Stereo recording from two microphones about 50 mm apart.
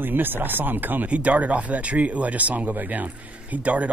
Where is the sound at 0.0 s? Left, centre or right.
Right.